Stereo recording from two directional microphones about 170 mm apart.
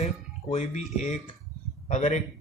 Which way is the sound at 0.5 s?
45° left (ahead or behind).